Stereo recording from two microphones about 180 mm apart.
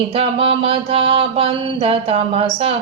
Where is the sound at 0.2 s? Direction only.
30° right (ahead or behind).